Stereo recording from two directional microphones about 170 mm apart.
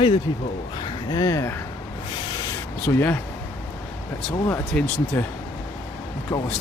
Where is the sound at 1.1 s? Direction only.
20° left (ahead or behind).